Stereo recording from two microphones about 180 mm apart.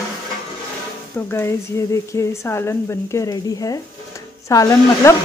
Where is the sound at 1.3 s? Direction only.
15° left (ahead or behind).